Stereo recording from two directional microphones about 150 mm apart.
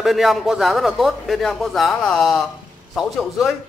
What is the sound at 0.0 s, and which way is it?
A man's voice, centre (ahead or behind).